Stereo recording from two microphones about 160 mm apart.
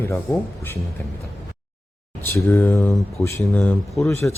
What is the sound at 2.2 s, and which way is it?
A man's voice, 15° left (ahead or behind).